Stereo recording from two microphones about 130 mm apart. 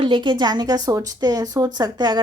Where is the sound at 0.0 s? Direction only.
40° right (ahead or behind).